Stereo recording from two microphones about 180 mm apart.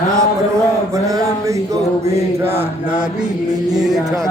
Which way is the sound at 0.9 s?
20° right (ahead or behind).